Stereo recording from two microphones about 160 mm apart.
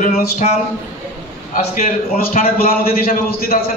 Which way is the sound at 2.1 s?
65° left (ahead or behind).